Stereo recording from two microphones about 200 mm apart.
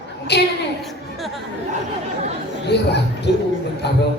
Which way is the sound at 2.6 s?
55° left (ahead or behind).